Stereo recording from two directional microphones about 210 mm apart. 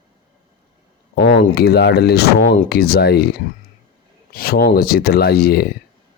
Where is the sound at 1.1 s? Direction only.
50° left (ahead or behind).